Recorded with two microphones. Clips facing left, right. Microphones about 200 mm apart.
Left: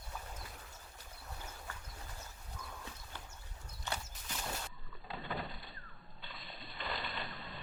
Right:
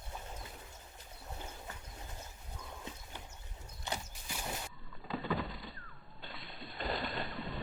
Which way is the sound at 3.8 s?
15° right (ahead or behind).